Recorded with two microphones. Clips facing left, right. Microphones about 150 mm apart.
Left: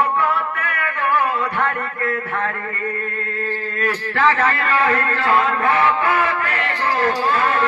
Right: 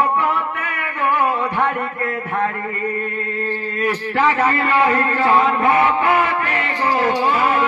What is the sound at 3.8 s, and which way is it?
A man's voice, 15° right (ahead or behind).